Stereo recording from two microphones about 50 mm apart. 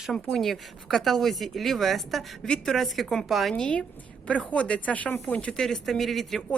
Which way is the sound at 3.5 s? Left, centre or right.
Left.